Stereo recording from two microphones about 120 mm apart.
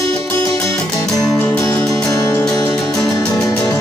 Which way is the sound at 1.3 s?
25° left (ahead or behind).